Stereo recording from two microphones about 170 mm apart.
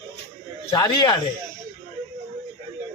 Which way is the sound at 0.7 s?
25° left (ahead or behind).